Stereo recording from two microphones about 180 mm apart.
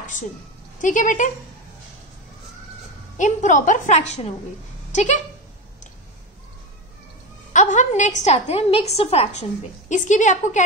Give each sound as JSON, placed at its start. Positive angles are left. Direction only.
{"t": 0.7, "sound": "a woman's voice", "side_deg": 45}
{"t": 3.2, "sound": "a woman's voice", "side_deg": 45}
{"t": 7.5, "sound": "a woman's voice", "side_deg": 45}